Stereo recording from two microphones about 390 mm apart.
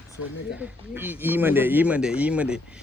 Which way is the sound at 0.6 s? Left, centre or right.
Centre.